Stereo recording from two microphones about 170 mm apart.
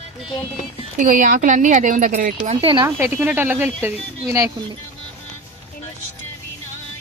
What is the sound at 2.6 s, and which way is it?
Speech, 30° right (ahead or behind).